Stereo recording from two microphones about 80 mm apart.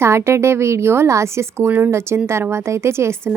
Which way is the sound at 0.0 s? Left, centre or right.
Right.